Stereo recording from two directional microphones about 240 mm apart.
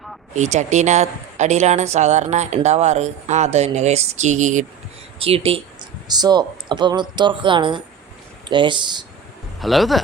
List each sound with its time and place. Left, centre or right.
0.3 s speech: right
9.6 s speech: centre